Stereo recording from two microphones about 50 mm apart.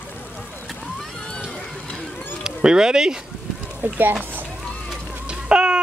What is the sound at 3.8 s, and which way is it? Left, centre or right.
Speech, right.